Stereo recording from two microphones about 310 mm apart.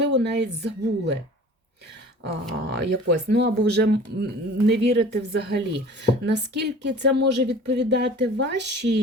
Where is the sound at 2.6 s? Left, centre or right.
Right.